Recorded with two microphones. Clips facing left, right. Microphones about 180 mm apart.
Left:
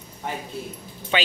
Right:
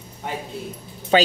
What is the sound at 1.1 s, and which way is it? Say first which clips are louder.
Speech: right 8 dB; 40° right (ahead or behind).